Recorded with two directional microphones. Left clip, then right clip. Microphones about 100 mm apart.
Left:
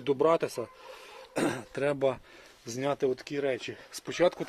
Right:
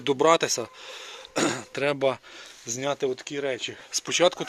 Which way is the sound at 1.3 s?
5° left (ahead or behind).